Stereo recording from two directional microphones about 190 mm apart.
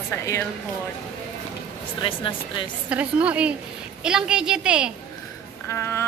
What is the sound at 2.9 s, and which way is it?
A woman's voice, 5° right (ahead or behind).